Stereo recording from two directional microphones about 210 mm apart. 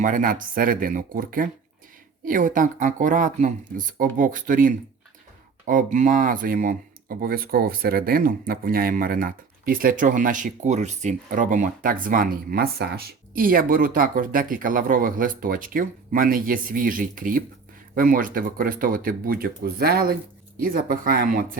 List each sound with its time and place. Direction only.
0.0 s speech: 40° right (ahead or behind)